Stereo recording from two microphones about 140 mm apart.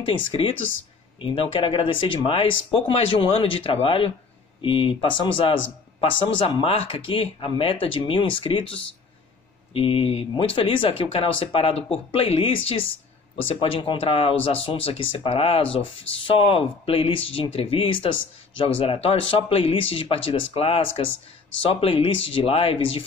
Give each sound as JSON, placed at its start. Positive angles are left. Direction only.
{"t": 0.0, "sound": "speech", "side_deg": 40}
{"t": 9.8, "sound": "speech", "side_deg": 40}